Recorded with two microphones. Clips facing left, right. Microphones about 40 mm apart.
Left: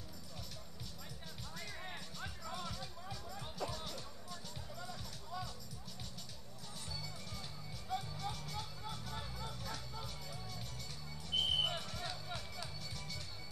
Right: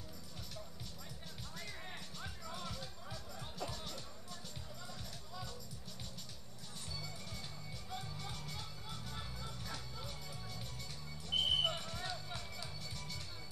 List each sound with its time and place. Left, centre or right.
1.6 s music: centre
6.9 s music: centre